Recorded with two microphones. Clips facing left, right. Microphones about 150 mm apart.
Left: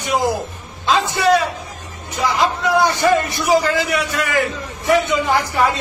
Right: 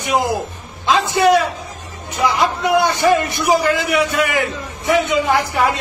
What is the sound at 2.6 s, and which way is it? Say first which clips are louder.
Speech: right 1 dB; 60° right (ahead or behind).